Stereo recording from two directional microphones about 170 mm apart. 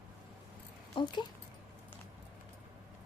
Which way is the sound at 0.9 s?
25° left (ahead or behind).